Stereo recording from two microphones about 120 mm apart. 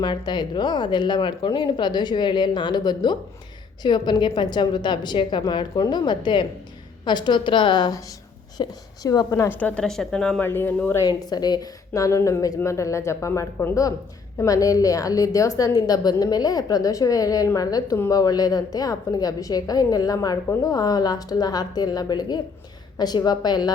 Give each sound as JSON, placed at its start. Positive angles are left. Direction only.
{"t": 0.0, "sound": "a woman's voice", "side_deg": 40}
{"t": 9.6, "sound": "speech", "side_deg": 10}
{"t": 10.8, "sound": "speech", "side_deg": 15}
{"t": 11.3, "sound": "a woman's voice", "side_deg": 35}